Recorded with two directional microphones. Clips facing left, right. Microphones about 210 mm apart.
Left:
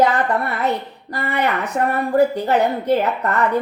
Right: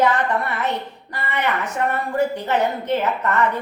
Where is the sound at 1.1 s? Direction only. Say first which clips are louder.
Left 3 dB; 35° left (ahead or behind).